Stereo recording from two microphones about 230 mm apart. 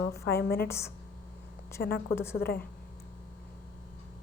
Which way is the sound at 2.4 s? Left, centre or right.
Left.